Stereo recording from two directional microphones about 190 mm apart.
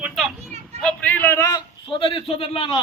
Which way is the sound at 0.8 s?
5° left (ahead or behind).